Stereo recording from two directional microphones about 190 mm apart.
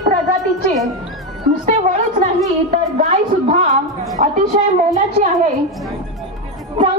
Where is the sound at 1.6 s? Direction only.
40° right (ahead or behind).